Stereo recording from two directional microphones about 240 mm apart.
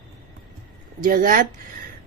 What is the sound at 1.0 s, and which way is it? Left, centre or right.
Speech, right.